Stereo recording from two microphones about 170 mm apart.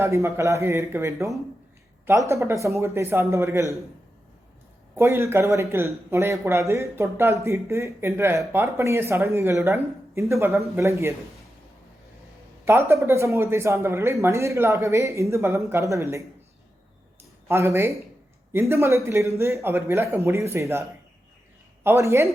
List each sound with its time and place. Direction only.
0.0 s speech: 15° right (ahead or behind)
4.9 s speech: 15° right (ahead or behind)
12.6 s speech: 15° right (ahead or behind)
17.5 s speech: 15° right (ahead or behind)
21.8 s speech: 15° right (ahead or behind)